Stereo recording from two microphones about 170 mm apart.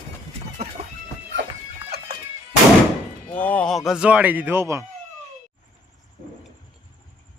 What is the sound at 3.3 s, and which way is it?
Speech, 10° left (ahead or behind).